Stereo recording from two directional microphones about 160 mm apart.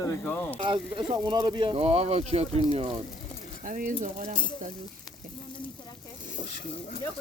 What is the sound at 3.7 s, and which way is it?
Speech, 55° right (ahead or behind).